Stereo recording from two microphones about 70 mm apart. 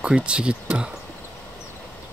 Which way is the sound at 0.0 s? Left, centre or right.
Centre.